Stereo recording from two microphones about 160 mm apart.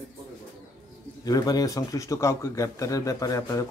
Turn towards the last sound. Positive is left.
turn(degrees=20)  # may be behind; listen again after turning